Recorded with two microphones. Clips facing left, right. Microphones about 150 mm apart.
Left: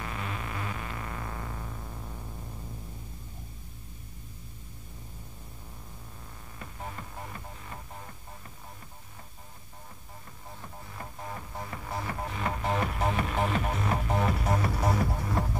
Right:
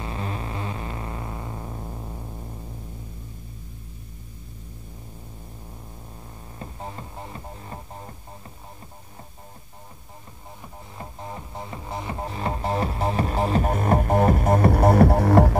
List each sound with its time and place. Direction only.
0.0 s music: 30° right (ahead or behind)
6.6 s music: 30° right (ahead or behind)
10.6 s music: 20° right (ahead or behind); by 15.5 s 75° right (ahead or behind)